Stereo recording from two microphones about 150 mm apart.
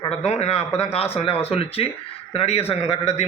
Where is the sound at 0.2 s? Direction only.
45° left (ahead or behind).